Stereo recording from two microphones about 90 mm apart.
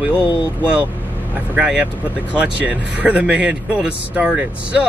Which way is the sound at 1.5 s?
10° right (ahead or behind).